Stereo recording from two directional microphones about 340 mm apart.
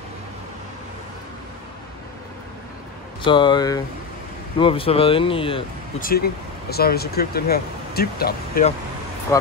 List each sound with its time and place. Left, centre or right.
3.3 s speech: centre
9.3 s speech: centre